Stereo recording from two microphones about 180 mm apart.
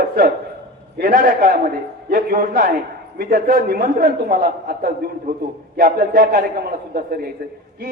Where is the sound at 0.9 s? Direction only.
55° right (ahead or behind).